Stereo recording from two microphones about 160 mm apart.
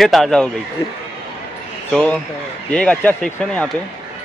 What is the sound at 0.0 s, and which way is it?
Speech, centre (ahead or behind).